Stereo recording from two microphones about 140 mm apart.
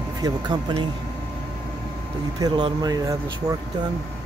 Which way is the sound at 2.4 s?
30° right (ahead or behind).